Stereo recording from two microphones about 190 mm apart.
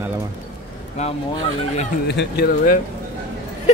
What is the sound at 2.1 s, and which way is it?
Speech, 60° left (ahead or behind).